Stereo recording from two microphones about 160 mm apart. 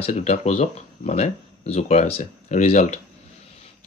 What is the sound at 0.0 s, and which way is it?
Speech, 45° left (ahead or behind).